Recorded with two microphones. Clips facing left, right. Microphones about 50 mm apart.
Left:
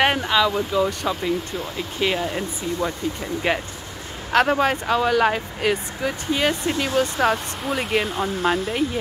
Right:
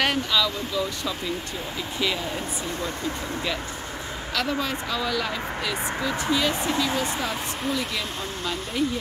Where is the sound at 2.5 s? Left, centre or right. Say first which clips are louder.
Left 3 dB; right.